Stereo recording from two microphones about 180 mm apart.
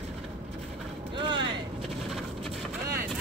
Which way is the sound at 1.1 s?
25° right (ahead or behind).